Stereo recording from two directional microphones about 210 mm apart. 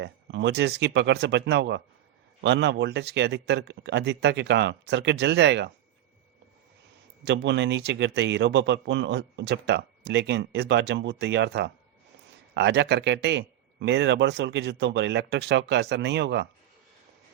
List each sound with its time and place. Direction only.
0.0 s a man's voice: 60° right (ahead or behind)
7.3 s a man's voice: 55° right (ahead or behind)